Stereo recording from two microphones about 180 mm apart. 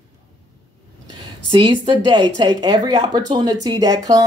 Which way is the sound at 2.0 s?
25° right (ahead or behind).